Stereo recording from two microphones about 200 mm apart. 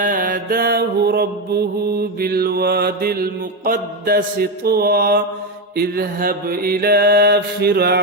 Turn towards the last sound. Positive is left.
turn(degrees=-55)  # may be behind; listen again after turning